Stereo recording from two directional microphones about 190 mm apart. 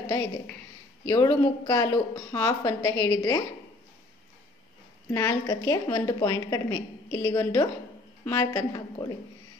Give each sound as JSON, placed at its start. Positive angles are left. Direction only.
{"t": 0.1, "sound": "a woman's voice", "side_deg": 15}
{"t": 5.1, "sound": "a woman's voice", "side_deg": 15}